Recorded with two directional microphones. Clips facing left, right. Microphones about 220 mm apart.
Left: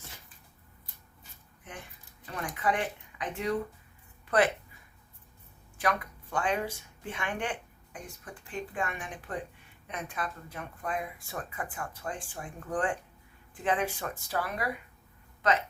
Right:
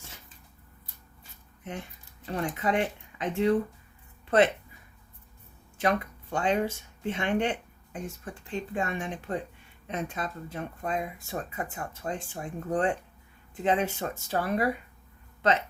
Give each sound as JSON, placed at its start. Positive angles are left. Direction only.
{"t": 2.2, "sound": "speech", "side_deg": -25}
{"t": 5.7, "sound": "speech", "side_deg": -25}